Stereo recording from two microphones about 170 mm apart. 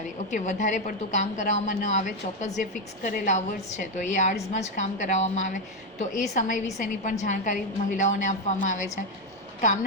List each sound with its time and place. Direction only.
0.3 s a woman's voice: 45° left (ahead or behind)